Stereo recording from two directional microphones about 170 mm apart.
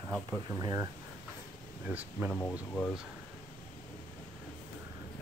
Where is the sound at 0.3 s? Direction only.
20° right (ahead or behind).